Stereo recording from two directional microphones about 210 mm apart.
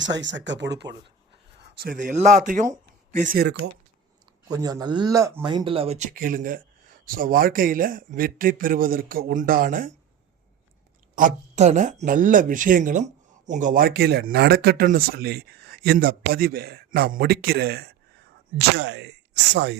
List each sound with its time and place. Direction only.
0.0 s speech: 60° right (ahead or behind)
1.8 s speech: 40° right (ahead or behind)
4.4 s speech: 20° right (ahead or behind); by 9.9 s 40° right (ahead or behind)
11.1 s speech: 40° right (ahead or behind); by 19.1 s 55° right (ahead or behind)